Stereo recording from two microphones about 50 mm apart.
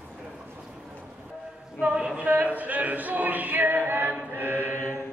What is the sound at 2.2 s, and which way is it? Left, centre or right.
Music, right.